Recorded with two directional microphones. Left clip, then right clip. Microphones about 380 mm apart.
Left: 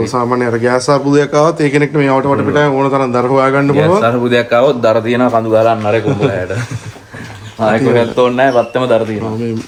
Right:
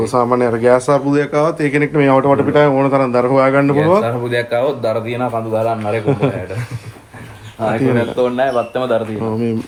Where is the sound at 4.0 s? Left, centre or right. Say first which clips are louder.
Left 6 dB; left.